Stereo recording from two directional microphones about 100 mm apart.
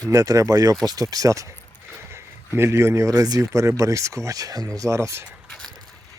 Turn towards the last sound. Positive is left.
turn(degrees=-30)  # may be behind; listen again after turning